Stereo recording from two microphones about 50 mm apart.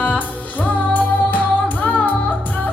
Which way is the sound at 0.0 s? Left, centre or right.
Left.